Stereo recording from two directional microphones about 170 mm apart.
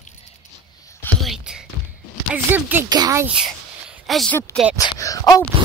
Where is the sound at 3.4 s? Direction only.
Centre (ahead or behind).